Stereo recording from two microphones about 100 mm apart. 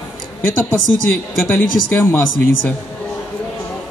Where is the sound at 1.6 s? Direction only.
20° left (ahead or behind).